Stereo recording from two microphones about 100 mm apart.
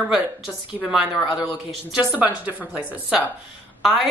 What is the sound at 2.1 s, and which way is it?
A woman's voice, 15° right (ahead or behind).